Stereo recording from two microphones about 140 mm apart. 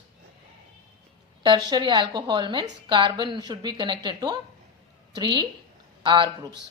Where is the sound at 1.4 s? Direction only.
30° right (ahead or behind).